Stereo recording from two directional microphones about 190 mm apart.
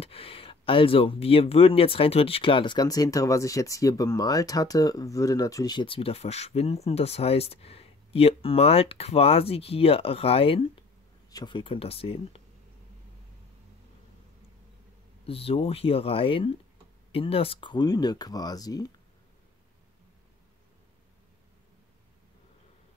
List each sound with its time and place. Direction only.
0.0 s speech: 30° left (ahead or behind)
15.2 s speech: 30° left (ahead or behind)